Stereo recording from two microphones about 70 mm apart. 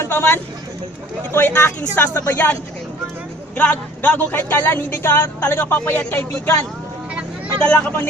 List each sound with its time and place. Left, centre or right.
0.0 s speech: left
7.6 s speech: centre